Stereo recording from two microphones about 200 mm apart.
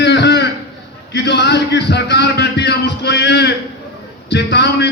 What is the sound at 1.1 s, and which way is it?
A man's voice, 60° left (ahead or behind).